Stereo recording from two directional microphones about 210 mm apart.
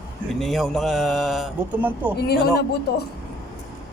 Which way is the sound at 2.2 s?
50° left (ahead or behind).